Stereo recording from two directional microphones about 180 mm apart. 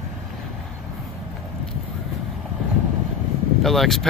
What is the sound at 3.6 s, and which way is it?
Speech, centre (ahead or behind).